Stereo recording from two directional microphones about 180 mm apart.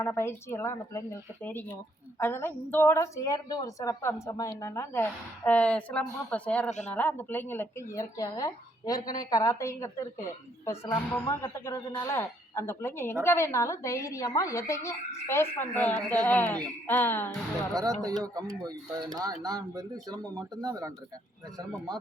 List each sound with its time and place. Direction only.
0.0 s speech: 15° left (ahead or behind)
6.7 s speech: 40° left (ahead or behind)
6.9 s speech: 10° left (ahead or behind)
17.7 s speech: 20° right (ahead or behind)